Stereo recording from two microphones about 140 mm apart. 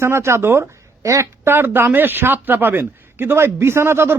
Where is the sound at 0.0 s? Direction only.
20° right (ahead or behind).